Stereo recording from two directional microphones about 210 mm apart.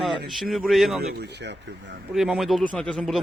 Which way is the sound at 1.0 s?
50° right (ahead or behind).